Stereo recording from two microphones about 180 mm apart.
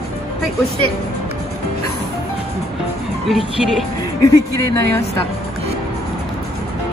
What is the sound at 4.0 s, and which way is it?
Speech, 20° left (ahead or behind).